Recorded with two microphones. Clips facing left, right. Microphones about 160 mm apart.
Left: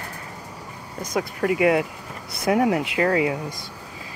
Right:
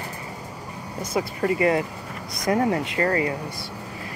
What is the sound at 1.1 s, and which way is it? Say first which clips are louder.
Speech: left 1 dB; centre (ahead or behind).